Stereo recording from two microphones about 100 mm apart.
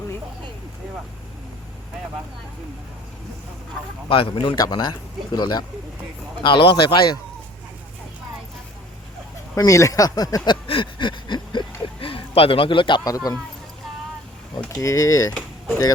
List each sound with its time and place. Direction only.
4.1 s speech: 60° left (ahead or behind)
6.4 s speech: 55° left (ahead or behind)
9.6 s speech: 35° left (ahead or behind); by 13.0 s 55° left (ahead or behind)
13.1 s speech: 40° left (ahead or behind)
14.8 s speech: 35° left (ahead or behind)